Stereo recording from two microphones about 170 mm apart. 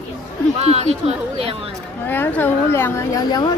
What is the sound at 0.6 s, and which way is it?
Speech, 40° right (ahead or behind).